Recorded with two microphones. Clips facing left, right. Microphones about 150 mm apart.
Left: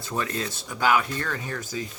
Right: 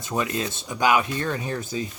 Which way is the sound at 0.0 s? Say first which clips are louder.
Right 3 dB; 15° right (ahead or behind).